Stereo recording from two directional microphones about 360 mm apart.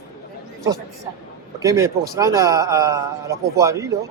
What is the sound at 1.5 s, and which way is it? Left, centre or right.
A man's voice, centre.